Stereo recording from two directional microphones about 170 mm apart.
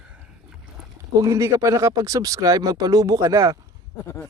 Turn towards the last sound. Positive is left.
turn(degrees=15)  # may be behind; listen again after turning